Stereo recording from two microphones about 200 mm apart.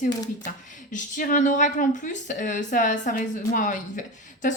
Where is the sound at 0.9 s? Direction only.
40° left (ahead or behind).